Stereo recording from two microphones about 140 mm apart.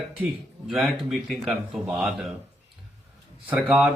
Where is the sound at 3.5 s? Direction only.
5° right (ahead or behind).